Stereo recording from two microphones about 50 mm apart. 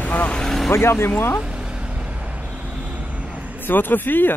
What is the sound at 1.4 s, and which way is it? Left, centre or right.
Vehicle, centre.